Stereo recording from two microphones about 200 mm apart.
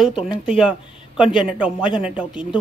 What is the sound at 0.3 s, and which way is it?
Speech, 5° right (ahead or behind).